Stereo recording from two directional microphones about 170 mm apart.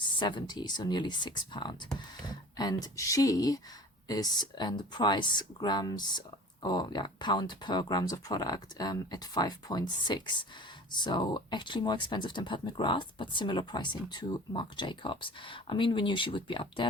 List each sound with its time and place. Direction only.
0.0 s speech: 25° left (ahead or behind)